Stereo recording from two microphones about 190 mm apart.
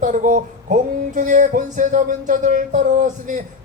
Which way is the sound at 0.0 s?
45° right (ahead or behind).